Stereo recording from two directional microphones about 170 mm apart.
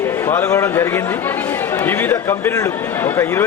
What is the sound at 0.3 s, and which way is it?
A man's voice, 15° left (ahead or behind).